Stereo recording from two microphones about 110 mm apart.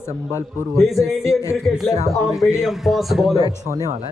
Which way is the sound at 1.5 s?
Centre (ahead or behind).